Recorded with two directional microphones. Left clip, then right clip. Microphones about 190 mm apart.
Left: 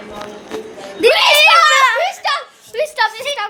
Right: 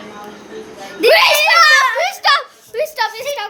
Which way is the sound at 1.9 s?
25° right (ahead or behind).